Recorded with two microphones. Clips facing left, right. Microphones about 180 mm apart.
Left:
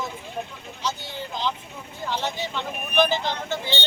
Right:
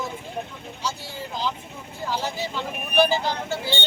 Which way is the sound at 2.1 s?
5° right (ahead or behind).